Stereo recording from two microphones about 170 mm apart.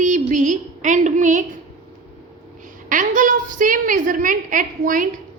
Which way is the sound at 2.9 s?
50° right (ahead or behind).